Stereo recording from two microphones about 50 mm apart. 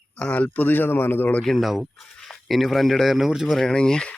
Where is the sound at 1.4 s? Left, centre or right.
Centre.